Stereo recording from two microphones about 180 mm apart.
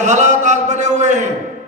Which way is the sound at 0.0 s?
40° right (ahead or behind).